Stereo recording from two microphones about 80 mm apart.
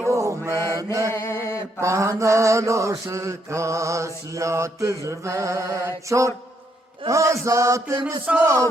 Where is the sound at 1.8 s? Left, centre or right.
Right.